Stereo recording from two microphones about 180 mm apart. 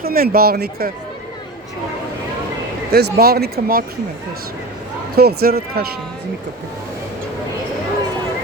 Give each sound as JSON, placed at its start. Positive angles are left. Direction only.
{"t": 0.0, "sound": "speech", "side_deg": -55}
{"t": 2.9, "sound": "speech", "side_deg": -60}
{"t": 5.1, "sound": "speech", "side_deg": -60}